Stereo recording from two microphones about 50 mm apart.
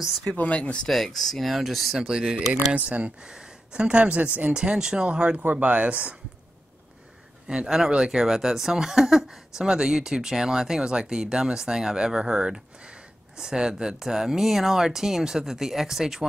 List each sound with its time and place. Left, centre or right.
0.4 s speech: left
0.8 s speech: centre
2.0 s speech: centre
3.3 s speech: centre
4.6 s speech: centre
5.4 s speech: right
7.4 s speech: centre